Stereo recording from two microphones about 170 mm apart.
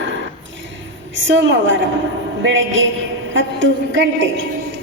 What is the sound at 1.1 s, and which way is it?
A woman's voice, 90° right.